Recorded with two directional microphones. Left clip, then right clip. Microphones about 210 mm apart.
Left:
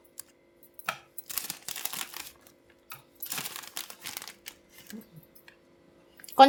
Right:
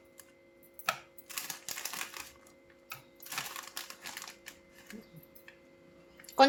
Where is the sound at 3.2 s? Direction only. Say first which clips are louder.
Left 2 dB; 40° left (ahead or behind).